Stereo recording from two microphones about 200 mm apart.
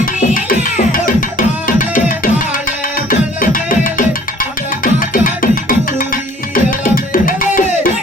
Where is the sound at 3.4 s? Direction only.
45° left (ahead or behind).